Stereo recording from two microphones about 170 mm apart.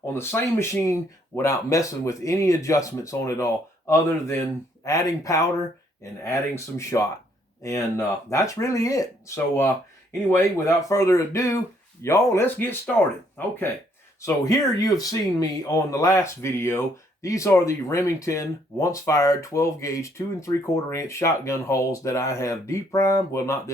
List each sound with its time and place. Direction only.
0.0 s speech: 15° left (ahead or behind)
6.5 s speech: 15° left (ahead or behind)
14.2 s speech: 20° left (ahead or behind)